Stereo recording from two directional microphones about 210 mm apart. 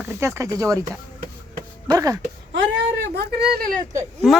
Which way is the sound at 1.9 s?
15° right (ahead or behind).